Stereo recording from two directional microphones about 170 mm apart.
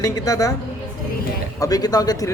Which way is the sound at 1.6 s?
20° left (ahead or behind).